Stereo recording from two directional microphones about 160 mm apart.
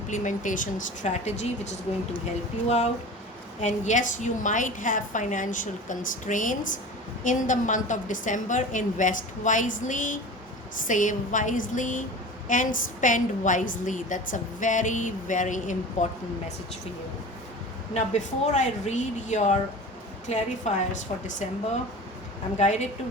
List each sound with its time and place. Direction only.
0.1 s a woman's voice: 55° left (ahead or behind)
17.9 s a woman's voice: 45° left (ahead or behind)